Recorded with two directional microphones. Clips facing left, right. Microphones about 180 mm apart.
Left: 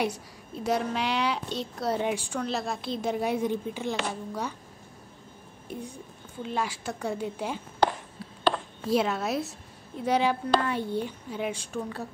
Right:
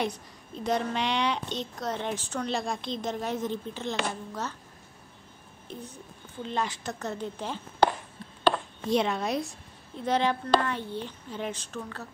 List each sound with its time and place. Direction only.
0.0 s a woman's voice: 10° left (ahead or behind)
5.7 s a woman's voice: 15° left (ahead or behind)
8.8 s a woman's voice: 5° left (ahead or behind)